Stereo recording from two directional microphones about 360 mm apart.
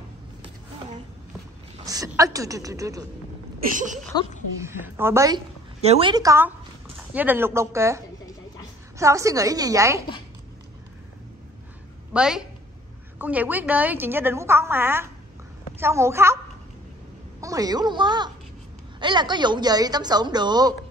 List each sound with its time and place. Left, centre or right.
1.8 s a woman's voice: centre
3.7 s speech: right
4.6 s a woman's voice: centre
12.1 s a woman's voice: centre
17.4 s a woman's voice: centre